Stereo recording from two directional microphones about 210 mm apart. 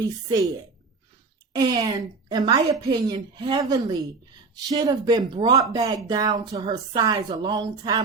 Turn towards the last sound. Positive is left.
turn(degrees=-20)  # may be behind; listen again after turning